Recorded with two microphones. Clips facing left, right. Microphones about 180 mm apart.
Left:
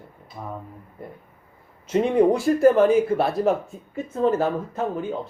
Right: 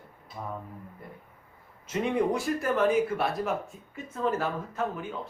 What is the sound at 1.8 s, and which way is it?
Speech, 30° left (ahead or behind).